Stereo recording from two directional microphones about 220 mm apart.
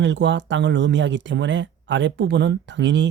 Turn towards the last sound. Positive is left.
turn(degrees=-55)  # may be behind; listen again after turning